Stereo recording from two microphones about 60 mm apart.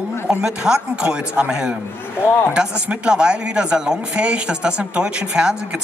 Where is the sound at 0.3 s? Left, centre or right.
Centre.